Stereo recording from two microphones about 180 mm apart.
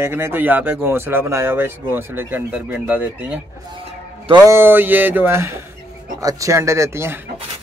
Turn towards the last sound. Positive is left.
turn(degrees=-15)  # may be behind; listen again after turning